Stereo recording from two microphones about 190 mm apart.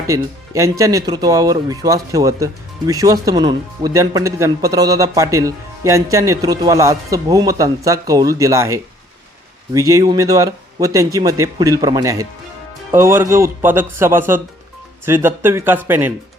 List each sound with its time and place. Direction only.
0.1 s speech: 15° right (ahead or behind)